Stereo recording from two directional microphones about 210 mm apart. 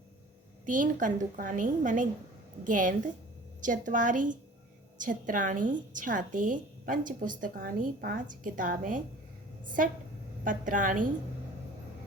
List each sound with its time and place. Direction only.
0.6 s a woman's voice: 40° right (ahead or behind)